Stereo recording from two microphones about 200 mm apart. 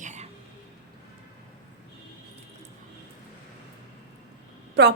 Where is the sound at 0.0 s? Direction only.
35° right (ahead or behind).